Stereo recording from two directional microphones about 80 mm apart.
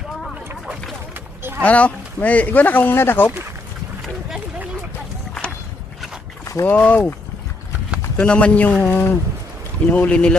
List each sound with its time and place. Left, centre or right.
1.1 s a sound: right
1.6 s speech: centre
6.4 s boat: left
6.7 s speech: centre
8.1 s a man's voice: centre